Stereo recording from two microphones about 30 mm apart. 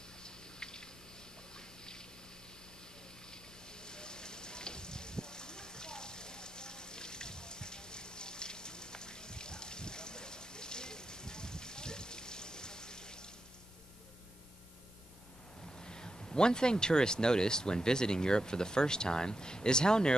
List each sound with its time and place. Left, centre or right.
0.2 s drip: left
3.8 s a sound: left
15.8 s speech: left